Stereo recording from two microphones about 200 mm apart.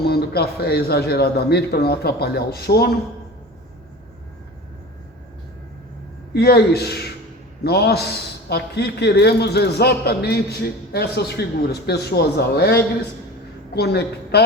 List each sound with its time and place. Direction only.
0.0 s a man's voice: 50° left (ahead or behind)
6.3 s a man's voice: 50° left (ahead or behind)